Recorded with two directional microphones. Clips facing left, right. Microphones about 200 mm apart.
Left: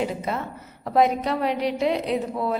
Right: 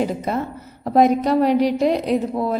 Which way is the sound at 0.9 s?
40° right (ahead or behind).